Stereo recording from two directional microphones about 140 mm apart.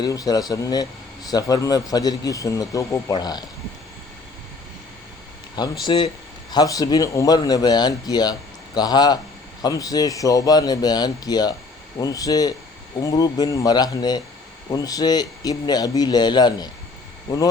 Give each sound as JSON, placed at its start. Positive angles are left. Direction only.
{"t": 0.0, "sound": "speech", "side_deg": 25}
{"t": 5.8, "sound": "speech", "side_deg": 35}